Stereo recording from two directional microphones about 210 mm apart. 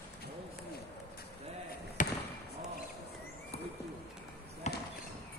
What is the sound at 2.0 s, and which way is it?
Basketball bounce, 35° left (ahead or behind).